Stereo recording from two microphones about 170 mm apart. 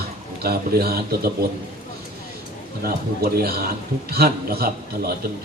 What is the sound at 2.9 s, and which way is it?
Speech, 60° right (ahead or behind).